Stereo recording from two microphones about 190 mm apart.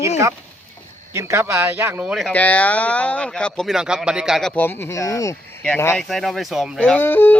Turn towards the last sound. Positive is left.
turn(degrees=10)  # may be behind; listen again after turning